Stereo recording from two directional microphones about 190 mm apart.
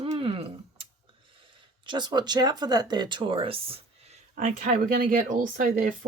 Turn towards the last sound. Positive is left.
turn(degrees=-45)  # may be behind; listen again after turning